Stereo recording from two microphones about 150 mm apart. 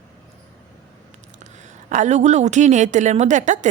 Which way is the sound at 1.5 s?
55° right (ahead or behind).